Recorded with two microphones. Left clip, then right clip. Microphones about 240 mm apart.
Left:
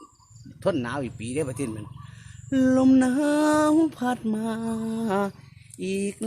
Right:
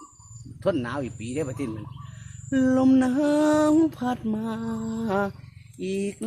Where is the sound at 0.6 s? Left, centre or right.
Left.